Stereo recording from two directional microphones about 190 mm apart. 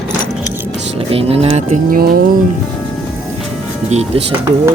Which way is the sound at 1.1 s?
30° right (ahead or behind).